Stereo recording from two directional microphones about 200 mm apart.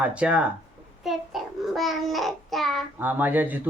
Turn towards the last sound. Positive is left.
turn(degrees=-10)  # may be behind; listen again after turning